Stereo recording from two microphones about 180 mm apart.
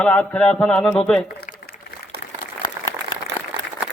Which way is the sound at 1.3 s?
55° left (ahead or behind).